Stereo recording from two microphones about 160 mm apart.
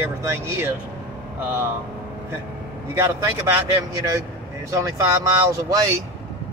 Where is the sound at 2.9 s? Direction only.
15° right (ahead or behind).